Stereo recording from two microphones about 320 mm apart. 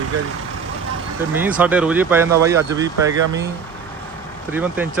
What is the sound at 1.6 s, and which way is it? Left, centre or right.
Speech, centre.